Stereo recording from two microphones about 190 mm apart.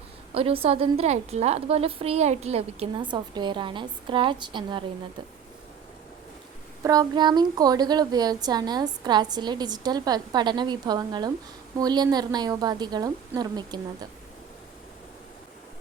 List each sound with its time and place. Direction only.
0.3 s a woman's voice: 30° right (ahead or behind)
6.8 s a woman's voice: 20° right (ahead or behind)